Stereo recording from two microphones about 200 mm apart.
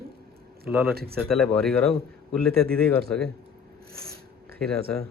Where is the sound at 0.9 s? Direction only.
50° right (ahead or behind).